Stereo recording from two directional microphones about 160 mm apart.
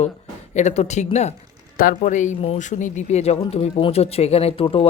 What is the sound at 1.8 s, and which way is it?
Speech, 55° left (ahead or behind).